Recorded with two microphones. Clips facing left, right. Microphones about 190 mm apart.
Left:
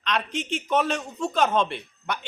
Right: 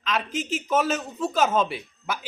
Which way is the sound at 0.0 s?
Centre (ahead or behind).